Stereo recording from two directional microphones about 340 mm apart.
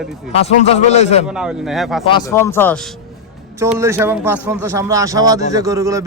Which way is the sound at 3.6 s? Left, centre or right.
Centre.